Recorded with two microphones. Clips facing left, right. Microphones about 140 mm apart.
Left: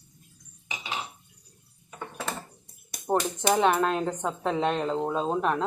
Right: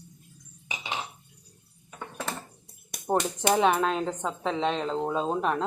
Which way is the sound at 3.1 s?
Centre (ahead or behind).